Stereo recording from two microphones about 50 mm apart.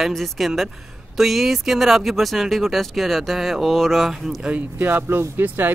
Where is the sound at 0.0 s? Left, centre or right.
Centre.